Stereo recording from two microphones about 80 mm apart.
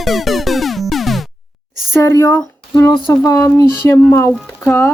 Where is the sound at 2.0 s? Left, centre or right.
Left.